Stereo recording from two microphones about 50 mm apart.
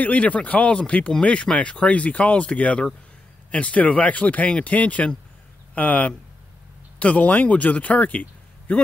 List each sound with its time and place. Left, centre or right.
0.0 s speech: left